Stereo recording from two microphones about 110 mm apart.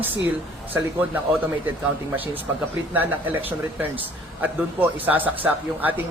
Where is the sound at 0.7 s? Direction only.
15° right (ahead or behind).